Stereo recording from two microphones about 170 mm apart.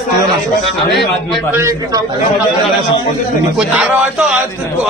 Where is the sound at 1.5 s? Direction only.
20° right (ahead or behind).